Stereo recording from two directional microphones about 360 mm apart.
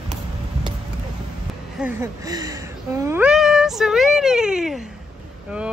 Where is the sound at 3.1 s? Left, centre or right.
Centre.